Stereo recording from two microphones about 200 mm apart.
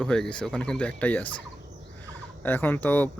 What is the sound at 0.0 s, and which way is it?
Speech, 5° left (ahead or behind).